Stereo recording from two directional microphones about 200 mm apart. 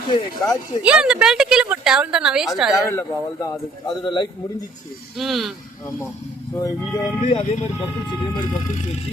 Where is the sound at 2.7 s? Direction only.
15° left (ahead or behind).